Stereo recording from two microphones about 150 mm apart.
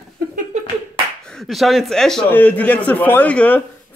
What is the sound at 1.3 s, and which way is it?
A man's voice, centre (ahead or behind).